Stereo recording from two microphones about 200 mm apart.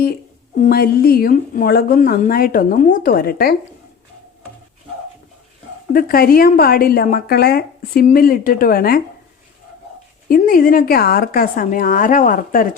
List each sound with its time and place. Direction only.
0.6 s a woman's voice: 50° left (ahead or behind)
5.9 s a woman's voice: 45° left (ahead or behind)
10.2 s a woman's voice: 45° left (ahead or behind)